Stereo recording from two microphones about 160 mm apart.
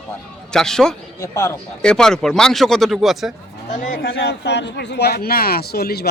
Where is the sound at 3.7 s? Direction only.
55° left (ahead or behind).